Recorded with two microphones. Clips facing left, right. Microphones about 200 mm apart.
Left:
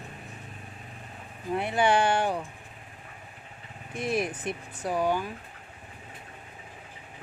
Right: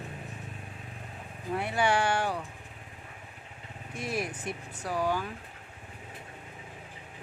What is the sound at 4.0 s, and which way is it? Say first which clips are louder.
Speech: left 5 dB; 20° left (ahead or behind).